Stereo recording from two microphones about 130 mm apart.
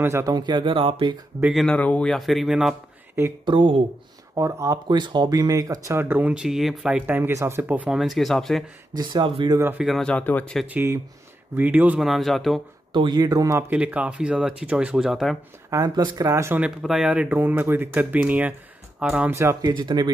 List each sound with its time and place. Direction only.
0.0 s speech: 25° right (ahead or behind); by 1.2 s 40° right (ahead or behind)
1.4 s speech: centre (ahead or behind)
3.4 s speech: 40° right (ahead or behind)
4.4 s speech: 25° right (ahead or behind); by 8.6 s centre (ahead or behind)
8.9 s speech: 35° right (ahead or behind)
9.6 s speech: 15° right (ahead or behind)
9.8 s speech: 5° left (ahead or behind)
10.7 s speech: 20° right (ahead or behind)
12.0 s speech: centre (ahead or behind)
12.9 s speech: 35° right (ahead or behind)
13.7 s speech: 10° right (ahead or behind)
15.7 s speech: 30° right (ahead or behind)
16.5 s speech: 5° right (ahead or behind)
19.7 s speech: 35° right (ahead or behind)